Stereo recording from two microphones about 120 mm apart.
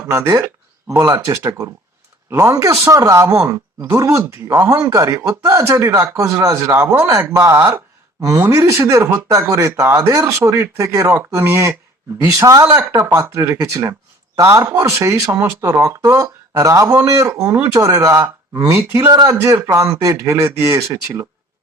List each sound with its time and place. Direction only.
0.1 s speech: 25° right (ahead or behind)